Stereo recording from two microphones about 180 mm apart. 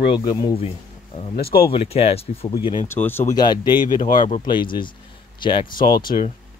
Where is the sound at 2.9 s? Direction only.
10° left (ahead or behind); by 5.9 s 25° left (ahead or behind).